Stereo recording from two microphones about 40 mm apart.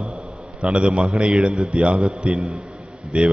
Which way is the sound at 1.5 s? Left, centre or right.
Right.